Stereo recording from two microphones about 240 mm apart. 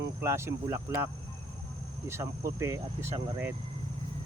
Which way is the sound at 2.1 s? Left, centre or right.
Centre.